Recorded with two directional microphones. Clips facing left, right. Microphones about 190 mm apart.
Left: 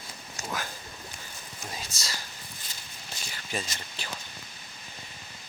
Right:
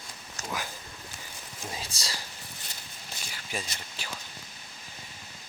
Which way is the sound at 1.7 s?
30° right (ahead or behind).